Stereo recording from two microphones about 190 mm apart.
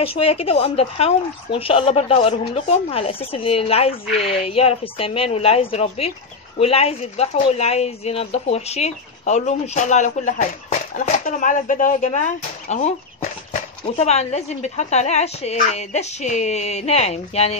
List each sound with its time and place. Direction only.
0.0 s speech: 30° left (ahead or behind)